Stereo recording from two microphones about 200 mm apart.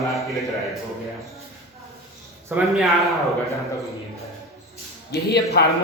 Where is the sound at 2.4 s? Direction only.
5° right (ahead or behind).